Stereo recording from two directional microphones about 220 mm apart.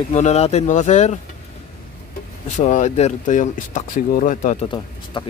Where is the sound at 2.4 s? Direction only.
35° left (ahead or behind).